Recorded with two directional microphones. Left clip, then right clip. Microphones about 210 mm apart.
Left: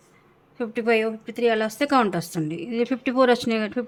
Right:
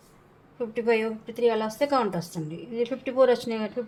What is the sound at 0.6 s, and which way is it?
A woman's voice, 30° left (ahead or behind).